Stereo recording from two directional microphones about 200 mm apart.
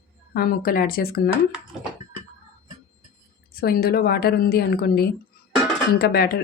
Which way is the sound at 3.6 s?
50° left (ahead or behind).